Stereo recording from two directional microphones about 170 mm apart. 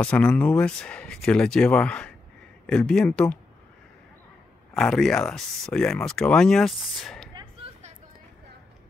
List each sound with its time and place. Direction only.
0.0 s speech: 5° left (ahead or behind)
4.7 s speech: 5° left (ahead or behind)
7.3 s a sound: 35° right (ahead or behind)